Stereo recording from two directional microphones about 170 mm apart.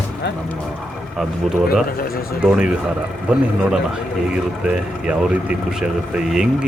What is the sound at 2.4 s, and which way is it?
Speech, 5° right (ahead or behind).